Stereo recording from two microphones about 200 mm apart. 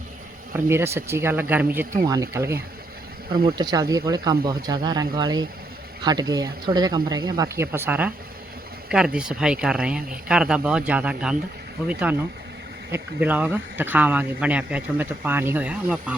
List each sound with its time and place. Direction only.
0.5 s speech: 10° right (ahead or behind)